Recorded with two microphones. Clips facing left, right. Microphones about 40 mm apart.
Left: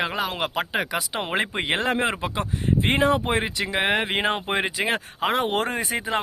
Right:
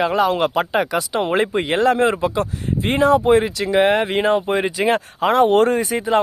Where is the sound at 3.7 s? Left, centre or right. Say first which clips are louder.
Right 8 dB; centre.